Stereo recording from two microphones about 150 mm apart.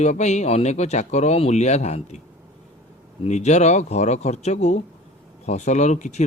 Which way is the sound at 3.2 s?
50° left (ahead or behind).